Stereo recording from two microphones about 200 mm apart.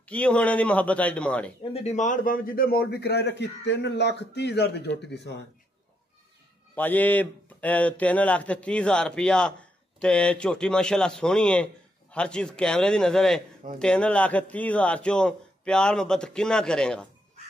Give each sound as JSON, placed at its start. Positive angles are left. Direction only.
{"t": 0.0, "sound": "a man's voice", "side_deg": 5}
{"t": 1.7, "sound": "a man's voice", "side_deg": 35}
{"t": 6.7, "sound": "speech", "side_deg": 10}